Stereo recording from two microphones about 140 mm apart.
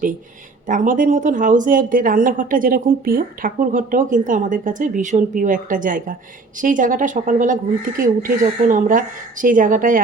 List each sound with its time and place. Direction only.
0.7 s speech: 70° right (ahead or behind)